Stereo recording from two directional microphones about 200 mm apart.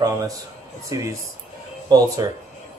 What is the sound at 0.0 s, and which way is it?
Speech, 15° right (ahead or behind).